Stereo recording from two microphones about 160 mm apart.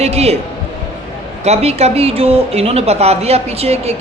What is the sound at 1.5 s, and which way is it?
Speech, 40° right (ahead or behind).